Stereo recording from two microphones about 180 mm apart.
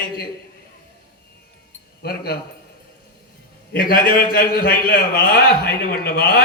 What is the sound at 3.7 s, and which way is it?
A man's voice, 50° left (ahead or behind).